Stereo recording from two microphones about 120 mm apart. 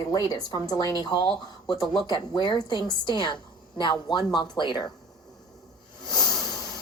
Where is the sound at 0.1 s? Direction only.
35° left (ahead or behind).